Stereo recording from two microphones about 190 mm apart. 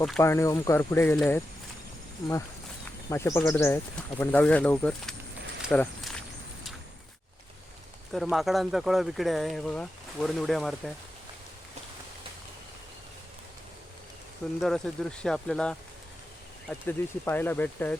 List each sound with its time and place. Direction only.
0.2 s speech: 15° left (ahead or behind)
3.1 s speech: 15° left (ahead or behind)
5.6 s a sound: 5° left (ahead or behind)
8.1 s speech: centre (ahead or behind)
14.6 s speech: 5° left (ahead or behind)